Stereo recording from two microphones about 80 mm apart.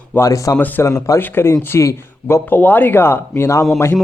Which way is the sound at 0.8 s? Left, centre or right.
Left.